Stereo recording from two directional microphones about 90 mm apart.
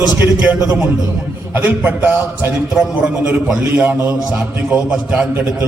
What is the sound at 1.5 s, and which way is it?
Speech, 20° right (ahead or behind).